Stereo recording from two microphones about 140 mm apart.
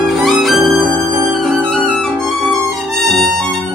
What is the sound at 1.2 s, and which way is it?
Music, 5° left (ahead or behind).